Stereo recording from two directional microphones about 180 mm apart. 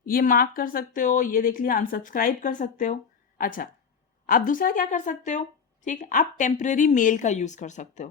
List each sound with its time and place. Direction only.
0.0 s speech: 50° left (ahead or behind)